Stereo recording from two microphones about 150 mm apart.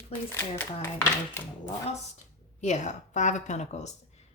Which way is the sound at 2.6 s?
50° left (ahead or behind).